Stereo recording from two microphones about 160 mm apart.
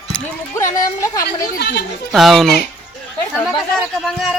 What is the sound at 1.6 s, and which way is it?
Speech, 90° left.